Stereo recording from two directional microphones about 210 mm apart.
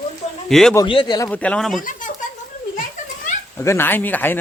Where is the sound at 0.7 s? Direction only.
20° left (ahead or behind).